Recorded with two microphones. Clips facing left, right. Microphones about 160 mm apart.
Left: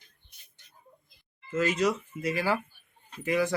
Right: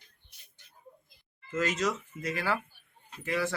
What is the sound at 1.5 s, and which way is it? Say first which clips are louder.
Speech: left 4 dB; 10° left (ahead or behind).